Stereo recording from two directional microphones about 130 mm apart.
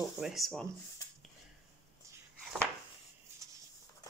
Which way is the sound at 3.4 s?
25° right (ahead or behind).